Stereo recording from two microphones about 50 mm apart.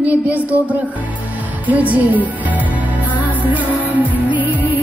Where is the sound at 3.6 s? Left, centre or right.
Right.